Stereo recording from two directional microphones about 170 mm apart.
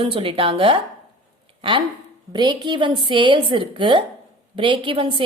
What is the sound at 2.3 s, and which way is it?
A woman's voice, 25° right (ahead or behind).